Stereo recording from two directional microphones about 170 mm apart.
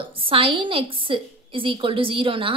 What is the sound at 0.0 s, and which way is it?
A woman's voice, 30° right (ahead or behind).